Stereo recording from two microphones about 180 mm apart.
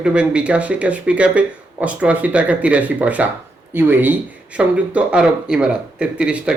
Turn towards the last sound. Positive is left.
turn(degrees=-5)  # may be behind; listen again after turning